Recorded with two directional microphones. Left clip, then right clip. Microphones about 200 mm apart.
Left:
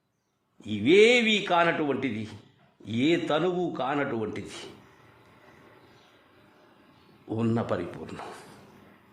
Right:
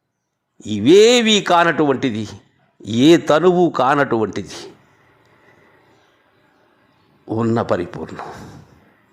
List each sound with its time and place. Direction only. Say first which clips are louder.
0.6 s a man's voice: right 9 dB; 30° right (ahead or behind)
7.3 s speech: right 10 dB; 30° right (ahead or behind)
8.0 s speech: right 9 dB; 15° right (ahead or behind)